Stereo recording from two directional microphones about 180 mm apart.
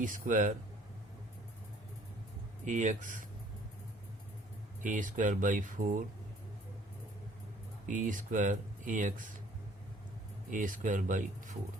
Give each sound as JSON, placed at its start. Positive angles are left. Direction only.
{"t": 0.0, "sound": "speech", "side_deg": -45}
{"t": 2.6, "sound": "speech", "side_deg": -45}
{"t": 4.8, "sound": "speech", "side_deg": -45}
{"t": 7.9, "sound": "speech", "side_deg": -45}
{"t": 10.5, "sound": "speech", "side_deg": -45}